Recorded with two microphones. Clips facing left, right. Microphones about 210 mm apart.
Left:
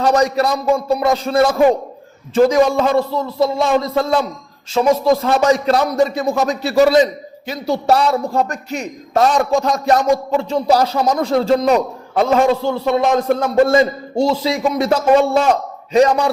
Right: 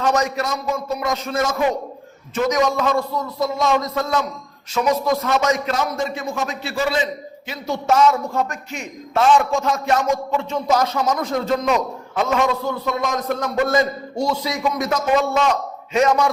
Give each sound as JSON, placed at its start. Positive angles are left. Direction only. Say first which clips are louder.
{"t": 0.0, "sound": "a man's voice", "louder": "left 5 dB", "side_deg": 35}